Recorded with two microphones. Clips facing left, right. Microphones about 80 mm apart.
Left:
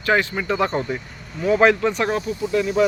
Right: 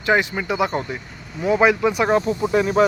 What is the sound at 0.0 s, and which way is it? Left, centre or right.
Speech, centre.